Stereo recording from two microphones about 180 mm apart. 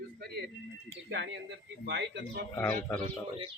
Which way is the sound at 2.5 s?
15° left (ahead or behind).